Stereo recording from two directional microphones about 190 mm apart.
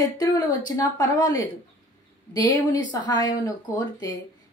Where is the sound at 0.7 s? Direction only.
20° left (ahead or behind).